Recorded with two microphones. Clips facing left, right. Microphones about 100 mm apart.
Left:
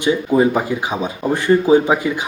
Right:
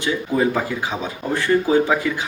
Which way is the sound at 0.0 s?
20° left (ahead or behind).